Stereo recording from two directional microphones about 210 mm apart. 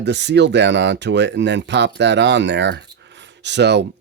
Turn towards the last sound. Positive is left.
turn(degrees=-55)  # may be behind; listen again after turning